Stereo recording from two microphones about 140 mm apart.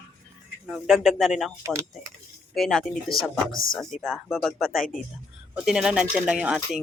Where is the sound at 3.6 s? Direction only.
90° left.